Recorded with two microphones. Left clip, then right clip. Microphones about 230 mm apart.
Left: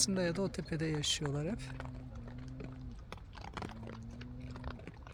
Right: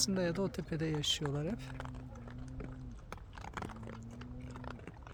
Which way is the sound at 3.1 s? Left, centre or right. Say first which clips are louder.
Right 1 dB; centre.